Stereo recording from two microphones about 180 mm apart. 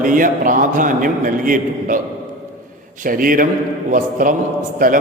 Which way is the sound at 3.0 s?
50° right (ahead or behind).